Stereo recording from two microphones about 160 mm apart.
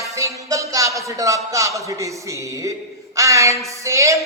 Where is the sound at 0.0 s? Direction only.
20° right (ahead or behind).